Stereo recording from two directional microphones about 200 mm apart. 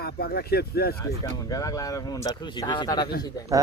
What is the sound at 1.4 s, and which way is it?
Speech, 15° left (ahead or behind).